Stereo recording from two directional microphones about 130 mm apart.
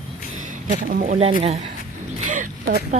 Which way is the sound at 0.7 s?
85° right.